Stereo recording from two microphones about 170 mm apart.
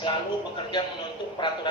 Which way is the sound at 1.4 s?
30° left (ahead or behind).